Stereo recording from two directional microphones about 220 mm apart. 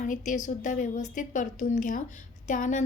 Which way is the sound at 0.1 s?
35° left (ahead or behind).